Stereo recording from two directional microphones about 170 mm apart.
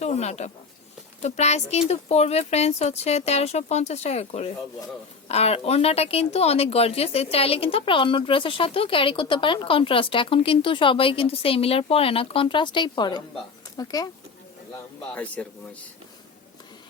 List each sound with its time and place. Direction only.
0.0 s speech: 40° left (ahead or behind); by 14.1 s 20° left (ahead or behind)
15.1 s speech: 10° left (ahead or behind)